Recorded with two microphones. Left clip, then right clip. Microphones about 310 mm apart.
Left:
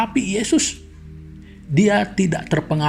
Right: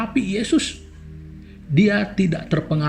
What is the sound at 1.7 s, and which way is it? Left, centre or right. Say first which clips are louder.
Speech: left 2 dB; left.